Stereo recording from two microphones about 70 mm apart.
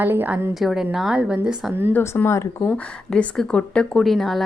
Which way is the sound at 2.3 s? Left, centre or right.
Left.